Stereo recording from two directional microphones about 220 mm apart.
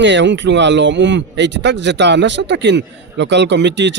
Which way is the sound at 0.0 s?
55° right (ahead or behind).